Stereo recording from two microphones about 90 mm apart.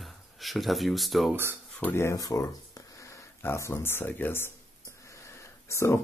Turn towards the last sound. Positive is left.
turn(degrees=30)  # may be behind; listen again after turning